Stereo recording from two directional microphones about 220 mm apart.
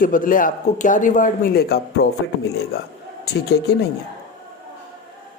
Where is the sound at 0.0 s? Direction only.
40° left (ahead or behind).